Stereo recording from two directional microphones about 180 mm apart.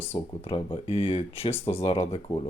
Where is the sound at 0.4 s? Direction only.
30° left (ahead or behind).